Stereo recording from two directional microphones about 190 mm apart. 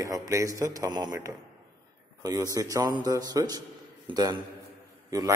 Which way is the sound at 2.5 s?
20° right (ahead or behind).